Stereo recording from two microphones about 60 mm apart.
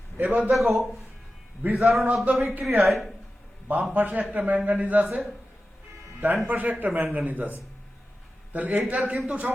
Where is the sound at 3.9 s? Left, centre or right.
Right.